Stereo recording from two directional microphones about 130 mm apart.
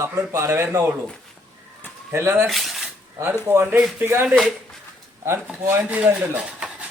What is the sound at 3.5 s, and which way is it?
Speech, 15° right (ahead or behind).